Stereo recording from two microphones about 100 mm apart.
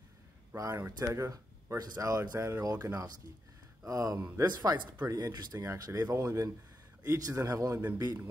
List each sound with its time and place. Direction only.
0.6 s speech: 30° right (ahead or behind)